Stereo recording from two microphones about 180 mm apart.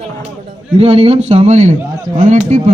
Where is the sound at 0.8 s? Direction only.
35° right (ahead or behind).